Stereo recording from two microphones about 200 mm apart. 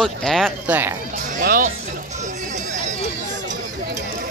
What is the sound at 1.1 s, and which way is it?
Music, 40° right (ahead or behind).